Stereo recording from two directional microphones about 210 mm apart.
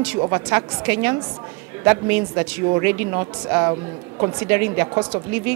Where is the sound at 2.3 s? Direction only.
10° right (ahead or behind).